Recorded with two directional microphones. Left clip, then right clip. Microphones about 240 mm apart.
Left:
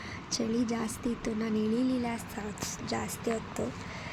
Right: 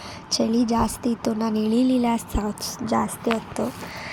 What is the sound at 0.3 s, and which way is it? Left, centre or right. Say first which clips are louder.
A woman's voice: right 10 dB; right.